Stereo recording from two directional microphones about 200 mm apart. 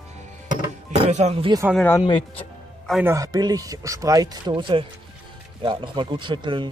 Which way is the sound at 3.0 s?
15° right (ahead or behind).